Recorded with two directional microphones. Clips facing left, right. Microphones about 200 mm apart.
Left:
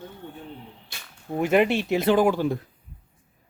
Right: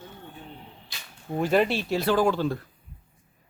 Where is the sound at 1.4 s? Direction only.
15° left (ahead or behind).